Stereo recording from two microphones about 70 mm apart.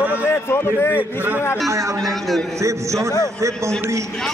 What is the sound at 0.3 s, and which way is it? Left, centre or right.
Speech, left.